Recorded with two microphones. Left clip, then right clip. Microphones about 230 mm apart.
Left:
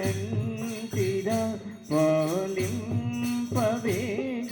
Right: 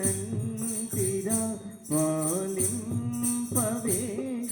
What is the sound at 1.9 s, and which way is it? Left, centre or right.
Jingle bell, right.